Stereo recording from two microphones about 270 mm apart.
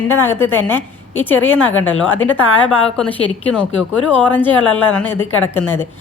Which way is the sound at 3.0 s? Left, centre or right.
Centre.